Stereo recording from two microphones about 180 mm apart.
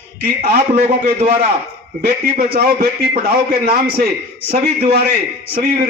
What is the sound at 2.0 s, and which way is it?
A man's voice, 60° right (ahead or behind).